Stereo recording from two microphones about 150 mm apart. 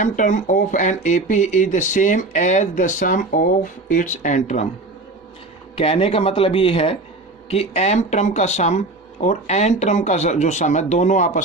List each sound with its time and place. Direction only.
0.0 s speech: 55° left (ahead or behind)
5.7 s speech: 40° left (ahead or behind)